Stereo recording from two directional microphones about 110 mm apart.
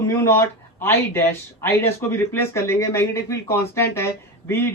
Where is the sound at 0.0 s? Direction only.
25° left (ahead or behind).